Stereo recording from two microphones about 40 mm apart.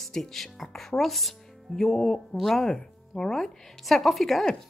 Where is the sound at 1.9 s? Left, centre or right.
Centre.